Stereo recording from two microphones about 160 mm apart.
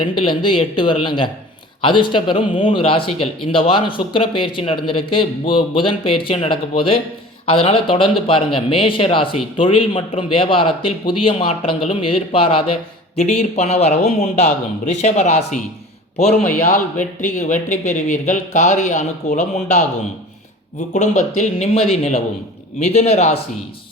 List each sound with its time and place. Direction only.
0.0 s speech: 30° left (ahead or behind)
13.1 s speech: 45° left (ahead or behind)
16.4 s a man's voice: 10° left (ahead or behind)
16.6 s speech: 55° left (ahead or behind)
20.9 s speech: 50° left (ahead or behind)